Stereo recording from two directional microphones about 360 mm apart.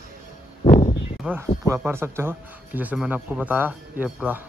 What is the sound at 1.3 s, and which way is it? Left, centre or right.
Speech, centre.